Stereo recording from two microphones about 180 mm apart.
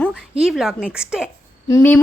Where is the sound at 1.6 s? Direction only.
20° left (ahead or behind).